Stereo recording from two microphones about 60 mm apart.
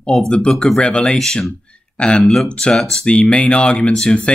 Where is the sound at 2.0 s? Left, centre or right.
Centre.